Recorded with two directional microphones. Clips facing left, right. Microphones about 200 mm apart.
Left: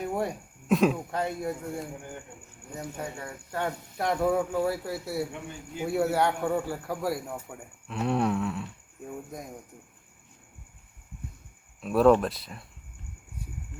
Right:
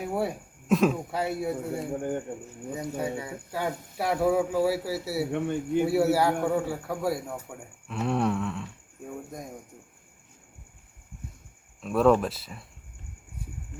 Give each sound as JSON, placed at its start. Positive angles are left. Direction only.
{"t": 0.0, "sound": "a man's voice", "side_deg": -5}
{"t": 1.9, "sound": "a man's voice", "side_deg": -50}
{"t": 3.0, "sound": "a man's voice", "side_deg": -5}
{"t": 5.3, "sound": "speech", "side_deg": -60}
{"t": 5.8, "sound": "a man's voice", "side_deg": -5}
{"t": 11.8, "sound": "a man's voice", "side_deg": 0}